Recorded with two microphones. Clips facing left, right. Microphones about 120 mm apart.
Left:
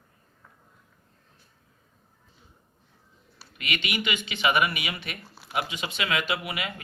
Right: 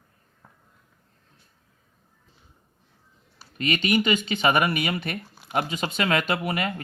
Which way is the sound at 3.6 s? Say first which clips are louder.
Right 8 dB; 40° right (ahead or behind).